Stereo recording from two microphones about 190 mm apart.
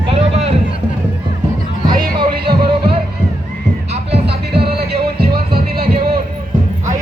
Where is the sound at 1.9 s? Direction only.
50° right (ahead or behind).